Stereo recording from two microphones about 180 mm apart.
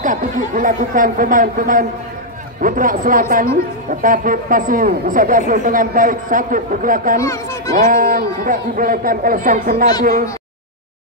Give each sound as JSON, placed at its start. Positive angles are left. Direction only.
{"t": 0.0, "sound": "a man's voice", "side_deg": -45}
{"t": 7.2, "sound": "speech", "side_deg": 15}
{"t": 7.7, "sound": "a man's voice", "side_deg": -50}